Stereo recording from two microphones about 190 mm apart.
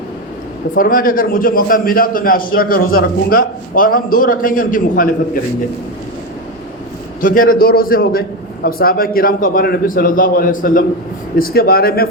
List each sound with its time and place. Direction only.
0.8 s a man's voice: 45° left (ahead or behind)
7.2 s a man's voice: 45° left (ahead or behind)